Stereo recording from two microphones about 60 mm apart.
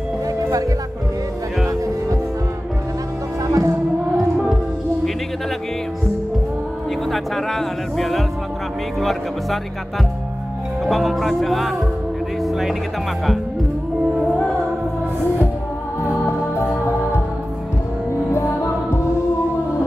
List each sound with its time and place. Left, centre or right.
3.4 s music: right
7.1 s speech: centre
10.9 s speech: centre
12.4 s music: centre
18.3 s music: left